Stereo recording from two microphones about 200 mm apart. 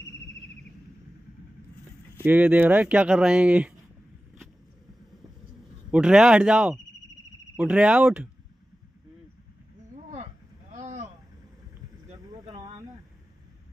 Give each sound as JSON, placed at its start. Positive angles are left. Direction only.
{"t": 2.2, "sound": "speech", "side_deg": -10}
{"t": 5.9, "sound": "speech", "side_deg": -5}
{"t": 10.7, "sound": "vehicle", "side_deg": -35}